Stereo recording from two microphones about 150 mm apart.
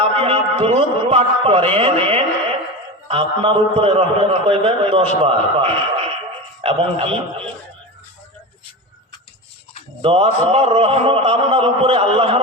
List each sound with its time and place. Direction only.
0.0 s a man's voice: 40° right (ahead or behind)
10.0 s a man's voice: 40° right (ahead or behind)